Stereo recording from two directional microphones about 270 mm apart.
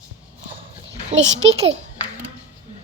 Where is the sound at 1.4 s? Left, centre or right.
Right.